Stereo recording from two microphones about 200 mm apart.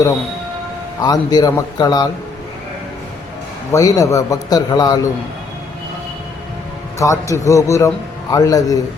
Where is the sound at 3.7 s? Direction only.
15° left (ahead or behind).